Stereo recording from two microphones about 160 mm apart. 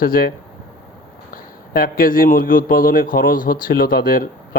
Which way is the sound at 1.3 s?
65° left (ahead or behind).